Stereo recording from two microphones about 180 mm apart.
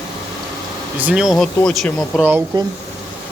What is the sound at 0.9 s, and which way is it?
Speech, 5° right (ahead or behind).